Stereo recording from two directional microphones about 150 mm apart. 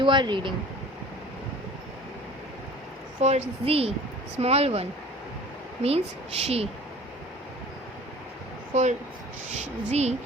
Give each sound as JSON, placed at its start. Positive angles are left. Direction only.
{"t": 0.0, "sound": "speech", "side_deg": -30}
{"t": 3.2, "sound": "a woman's voice", "side_deg": -45}
{"t": 8.7, "sound": "a woman's voice", "side_deg": -50}